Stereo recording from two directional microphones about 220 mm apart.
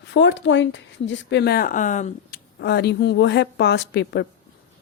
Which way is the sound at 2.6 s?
50° left (ahead or behind).